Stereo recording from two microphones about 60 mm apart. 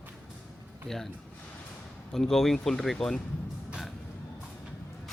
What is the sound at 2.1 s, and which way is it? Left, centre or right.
A man's voice, centre.